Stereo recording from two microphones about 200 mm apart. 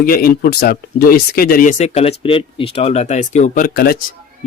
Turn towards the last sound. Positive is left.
turn(degrees=45)  # may be behind; listen again after turning